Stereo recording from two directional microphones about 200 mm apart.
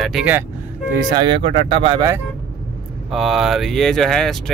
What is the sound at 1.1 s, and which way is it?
Speech, 25° right (ahead or behind).